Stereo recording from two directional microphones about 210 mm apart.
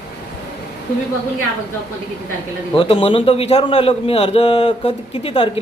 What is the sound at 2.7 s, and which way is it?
A man's voice, 25° left (ahead or behind).